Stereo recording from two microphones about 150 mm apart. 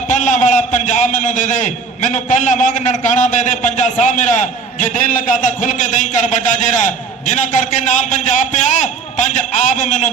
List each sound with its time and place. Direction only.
0.1 s a man's voice: 55° left (ahead or behind)